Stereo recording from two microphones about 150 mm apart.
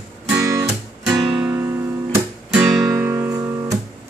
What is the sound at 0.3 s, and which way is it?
Guitar, 20° right (ahead or behind).